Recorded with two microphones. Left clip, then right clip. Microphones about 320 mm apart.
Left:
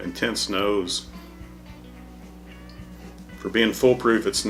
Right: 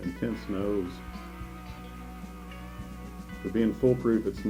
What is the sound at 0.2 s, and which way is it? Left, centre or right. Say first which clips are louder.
Speech: left 11 dB; centre.